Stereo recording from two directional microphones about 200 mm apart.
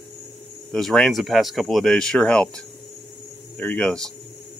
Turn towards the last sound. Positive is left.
turn(degrees=5)  # may be behind; listen again after turning